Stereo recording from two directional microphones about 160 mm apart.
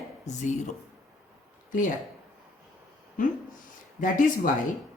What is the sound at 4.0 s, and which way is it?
Speech, 55° left (ahead or behind).